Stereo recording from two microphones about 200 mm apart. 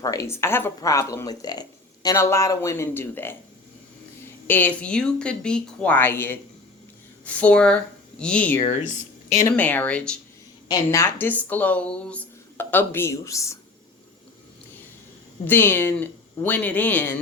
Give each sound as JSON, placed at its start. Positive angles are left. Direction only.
{"t": 0.0, "sound": "a woman's voice", "side_deg": 15}
{"t": 4.4, "sound": "a woman's voice", "side_deg": 10}
{"t": 15.4, "sound": "a woman's voice", "side_deg": 10}